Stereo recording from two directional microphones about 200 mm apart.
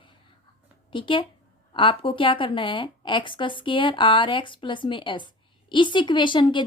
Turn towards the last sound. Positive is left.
turn(degrees=25)  # may be behind; listen again after turning